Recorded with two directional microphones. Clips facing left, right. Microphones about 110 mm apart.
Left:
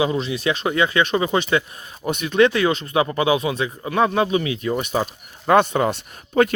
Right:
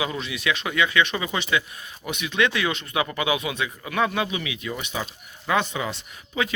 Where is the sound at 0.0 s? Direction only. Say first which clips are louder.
Left 7 dB; 30° left (ahead or behind).